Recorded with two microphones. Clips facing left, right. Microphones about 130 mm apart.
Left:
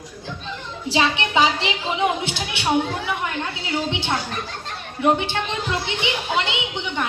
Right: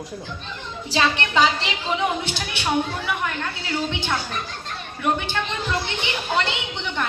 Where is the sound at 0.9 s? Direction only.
20° left (ahead or behind).